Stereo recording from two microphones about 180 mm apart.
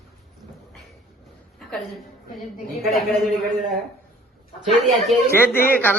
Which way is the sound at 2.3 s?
Centre (ahead or behind).